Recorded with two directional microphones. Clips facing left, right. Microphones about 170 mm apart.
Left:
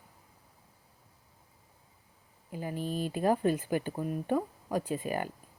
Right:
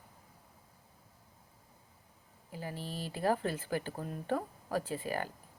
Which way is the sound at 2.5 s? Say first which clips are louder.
Left 6 dB; 20° left (ahead or behind).